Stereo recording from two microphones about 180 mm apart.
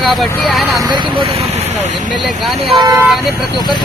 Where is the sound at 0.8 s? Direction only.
25° right (ahead or behind).